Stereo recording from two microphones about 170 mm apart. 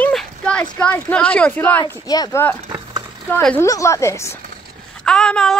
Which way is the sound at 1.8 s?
25° left (ahead or behind).